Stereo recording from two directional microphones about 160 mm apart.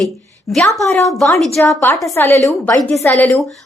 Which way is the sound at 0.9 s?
15° left (ahead or behind).